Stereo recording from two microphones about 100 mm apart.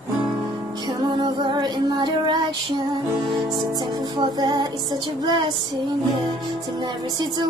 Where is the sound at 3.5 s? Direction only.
45° right (ahead or behind).